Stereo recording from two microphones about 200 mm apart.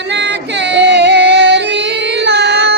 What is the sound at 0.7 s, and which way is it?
Music, 60° right (ahead or behind).